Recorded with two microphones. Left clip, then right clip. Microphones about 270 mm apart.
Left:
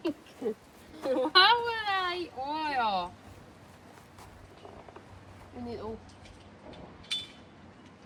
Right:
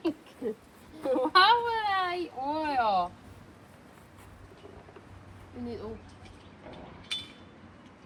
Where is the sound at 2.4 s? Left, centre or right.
Centre.